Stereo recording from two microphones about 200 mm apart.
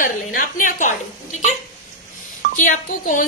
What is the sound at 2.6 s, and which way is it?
Speech, 40° left (ahead or behind).